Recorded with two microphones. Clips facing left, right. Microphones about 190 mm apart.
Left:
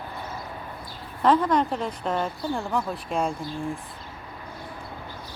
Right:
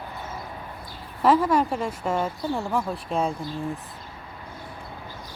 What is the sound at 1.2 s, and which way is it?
Speech, 5° right (ahead or behind).